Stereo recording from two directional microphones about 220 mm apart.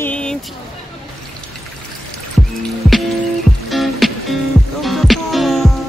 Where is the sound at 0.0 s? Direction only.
5° left (ahead or behind).